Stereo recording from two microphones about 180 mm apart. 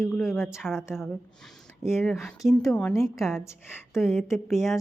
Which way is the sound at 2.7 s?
10° left (ahead or behind).